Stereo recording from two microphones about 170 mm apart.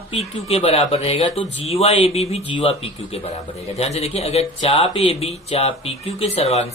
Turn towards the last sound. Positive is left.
turn(degrees=40)  # may be behind; listen again after turning